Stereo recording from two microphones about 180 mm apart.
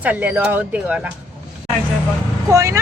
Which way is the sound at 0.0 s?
10° right (ahead or behind).